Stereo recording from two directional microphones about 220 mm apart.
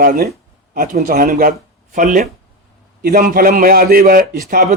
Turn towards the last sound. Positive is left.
turn(degrees=-40)  # may be behind; listen again after turning